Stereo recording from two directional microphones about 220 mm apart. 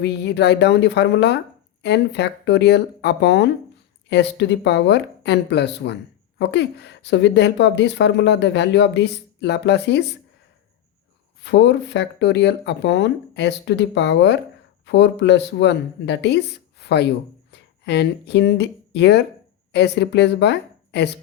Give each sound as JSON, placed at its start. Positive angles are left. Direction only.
{"t": 0.0, "sound": "speech", "side_deg": 50}
{"t": 11.4, "sound": "speech", "side_deg": 55}